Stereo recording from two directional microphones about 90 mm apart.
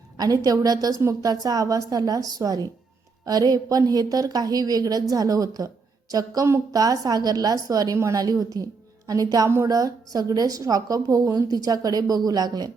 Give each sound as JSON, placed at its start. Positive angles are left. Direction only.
{"t": 0.2, "sound": "a woman's voice", "side_deg": -45}